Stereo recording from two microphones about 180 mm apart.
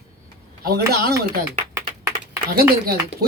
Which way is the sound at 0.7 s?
60° right (ahead or behind).